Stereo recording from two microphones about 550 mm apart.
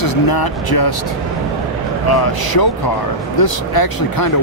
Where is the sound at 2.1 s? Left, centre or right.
Left.